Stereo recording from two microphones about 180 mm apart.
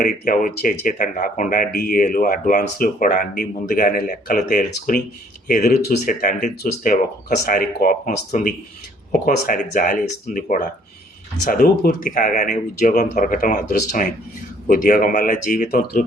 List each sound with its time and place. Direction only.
0.0 s speech: 50° left (ahead or behind)